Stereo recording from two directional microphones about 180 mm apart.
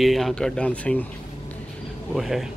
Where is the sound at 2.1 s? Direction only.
Centre (ahead or behind).